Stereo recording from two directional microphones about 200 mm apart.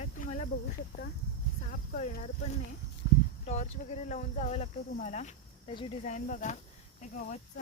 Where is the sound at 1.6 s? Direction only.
40° left (ahead or behind).